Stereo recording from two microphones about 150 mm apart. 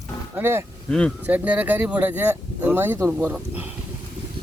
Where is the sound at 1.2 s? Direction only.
10° right (ahead or behind).